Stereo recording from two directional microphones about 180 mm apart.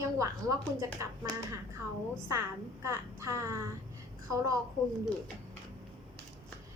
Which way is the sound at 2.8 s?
15° right (ahead or behind).